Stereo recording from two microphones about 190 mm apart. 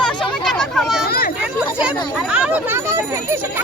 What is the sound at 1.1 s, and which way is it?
Speech, 55° left (ahead or behind).